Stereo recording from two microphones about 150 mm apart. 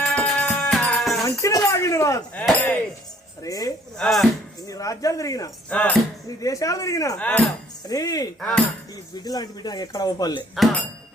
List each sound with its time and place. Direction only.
0.0 s music: 5° left (ahead or behind)
1.2 s a sound: 20° left (ahead or behind)
2.3 s speech: 10° left (ahead or behind)
3.4 s speech: 25° left (ahead or behind)
3.9 s speech: centre (ahead or behind)
4.6 s speech: 20° left (ahead or behind)
5.7 s speech: 10° left (ahead or behind)
6.2 s speech: 20° left (ahead or behind)
7.2 s speech: 10° left (ahead or behind)
7.9 s speech: 25° left (ahead or behind)
8.4 s speech: 5° left (ahead or behind)
9.1 s speech: 25° left (ahead or behind)